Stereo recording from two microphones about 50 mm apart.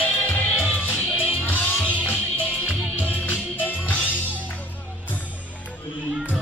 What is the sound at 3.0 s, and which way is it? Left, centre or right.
Music, left.